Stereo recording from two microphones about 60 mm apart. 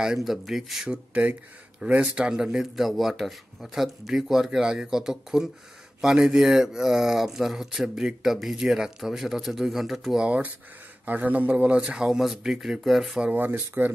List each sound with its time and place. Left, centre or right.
0.0 s speech: centre
0.8 s a man's voice: right; by 10.2 s centre
10.2 s speech: right; by 13.2 s centre
13.4 s speech: right